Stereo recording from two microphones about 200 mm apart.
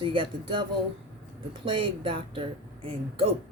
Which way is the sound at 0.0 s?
25° right (ahead or behind).